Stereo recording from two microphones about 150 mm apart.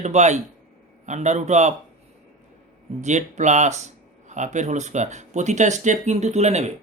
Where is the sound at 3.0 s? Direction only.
50° right (ahead or behind).